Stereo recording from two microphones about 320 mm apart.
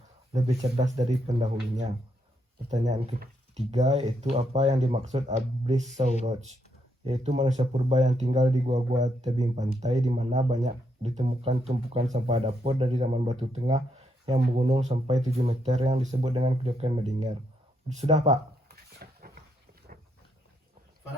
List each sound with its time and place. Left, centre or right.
0.3 s speech: right
7.0 s speech: centre
18.0 s a sound: right